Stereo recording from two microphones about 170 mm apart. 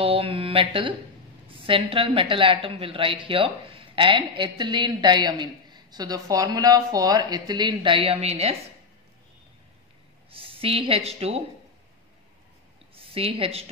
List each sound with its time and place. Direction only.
0.0 s a sound: 35° right (ahead or behind)
1.5 s a woman's voice: 30° right (ahead or behind)
10.3 s a woman's voice: 35° right (ahead or behind)
12.9 s speech: 35° right (ahead or behind)